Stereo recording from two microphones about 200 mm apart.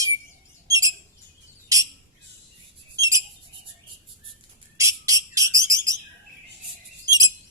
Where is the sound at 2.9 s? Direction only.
15° right (ahead or behind).